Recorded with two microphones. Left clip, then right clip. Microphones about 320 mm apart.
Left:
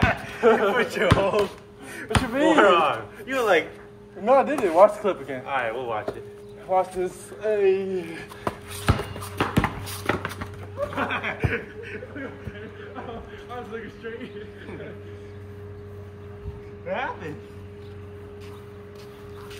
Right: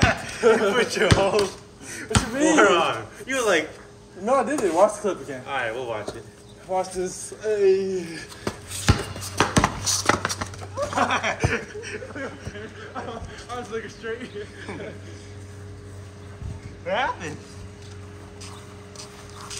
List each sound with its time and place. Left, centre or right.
0.4 s speech: centre
0.7 s speech: centre
2.0 s speech: left
2.5 s speech: centre
4.2 s a man's voice: left
5.5 s speech: centre
6.7 s a man's voice: centre
9.5 s a sound: centre
13.5 s speech: centre
16.8 s speech: right